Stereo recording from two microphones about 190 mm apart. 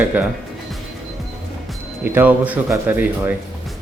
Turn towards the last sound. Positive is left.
turn(degrees=-10)  # may be behind; listen again after turning